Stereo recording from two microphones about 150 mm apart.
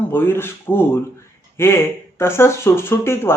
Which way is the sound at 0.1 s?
15° left (ahead or behind).